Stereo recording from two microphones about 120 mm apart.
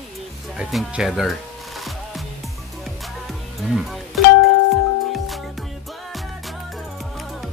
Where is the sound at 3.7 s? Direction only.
Centre (ahead or behind).